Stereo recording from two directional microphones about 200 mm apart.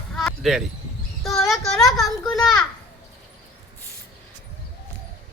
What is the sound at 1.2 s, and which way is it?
A child's voice, centre (ahead or behind).